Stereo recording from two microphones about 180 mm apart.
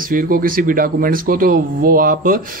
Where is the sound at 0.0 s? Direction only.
50° right (ahead or behind).